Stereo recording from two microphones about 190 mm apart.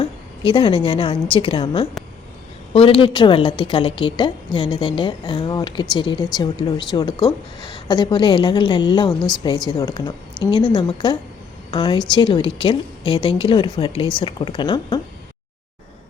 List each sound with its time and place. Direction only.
0.0 s a woman's voice: 25° left (ahead or behind)